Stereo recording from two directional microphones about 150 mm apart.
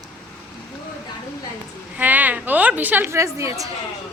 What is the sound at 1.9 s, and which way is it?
A woman's voice, 10° right (ahead or behind).